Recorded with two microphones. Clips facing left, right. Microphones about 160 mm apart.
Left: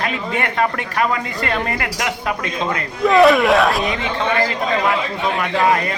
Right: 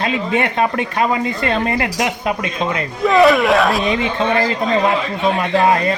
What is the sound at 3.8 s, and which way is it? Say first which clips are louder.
Speech: right 4 dB; 20° right (ahead or behind).